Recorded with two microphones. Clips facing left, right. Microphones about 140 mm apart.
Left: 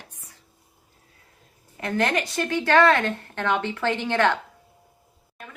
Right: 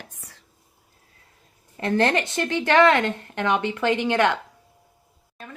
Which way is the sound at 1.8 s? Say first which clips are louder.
Right 3 dB; 30° right (ahead or behind).